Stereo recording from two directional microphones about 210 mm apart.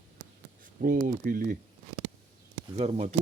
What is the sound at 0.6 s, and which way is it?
Speech, 40° right (ahead or behind).